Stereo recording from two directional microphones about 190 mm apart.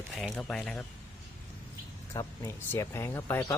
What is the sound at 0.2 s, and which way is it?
Speech, 5° left (ahead or behind).